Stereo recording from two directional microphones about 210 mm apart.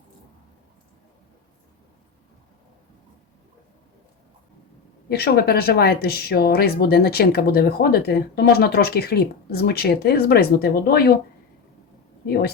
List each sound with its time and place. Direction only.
5.0 s speech: 50° left (ahead or behind)
12.2 s speech: 50° left (ahead or behind)